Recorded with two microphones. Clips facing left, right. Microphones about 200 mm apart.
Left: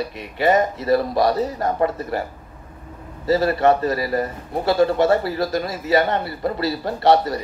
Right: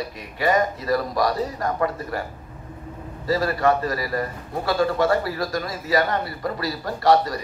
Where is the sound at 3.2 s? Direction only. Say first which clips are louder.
Left 4 dB; 25° left (ahead or behind).